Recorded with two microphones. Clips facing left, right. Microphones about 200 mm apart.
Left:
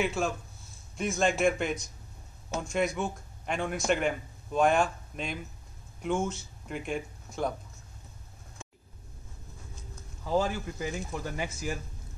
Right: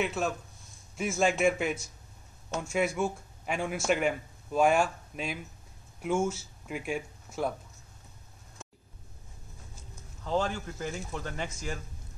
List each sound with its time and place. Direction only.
0.0 s a man's voice: centre (ahead or behind)
10.2 s speech: 10° left (ahead or behind)